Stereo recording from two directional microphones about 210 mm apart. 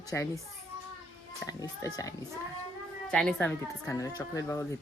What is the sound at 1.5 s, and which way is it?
Speech, 15° left (ahead or behind).